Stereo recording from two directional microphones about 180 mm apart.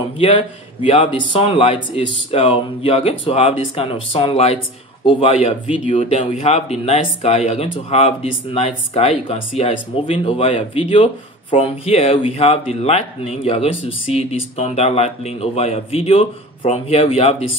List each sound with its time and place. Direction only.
0.8 s speech: 30° left (ahead or behind)